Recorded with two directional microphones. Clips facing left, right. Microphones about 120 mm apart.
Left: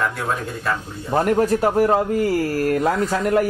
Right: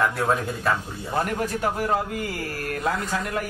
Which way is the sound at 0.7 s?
Centre (ahead or behind).